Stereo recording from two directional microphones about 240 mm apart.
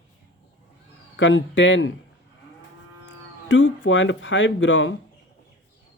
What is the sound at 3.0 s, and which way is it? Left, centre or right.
Speech, left.